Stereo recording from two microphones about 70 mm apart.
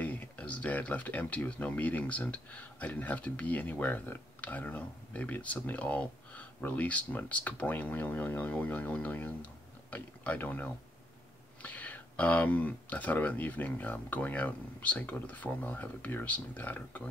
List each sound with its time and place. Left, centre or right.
0.0 s speech: left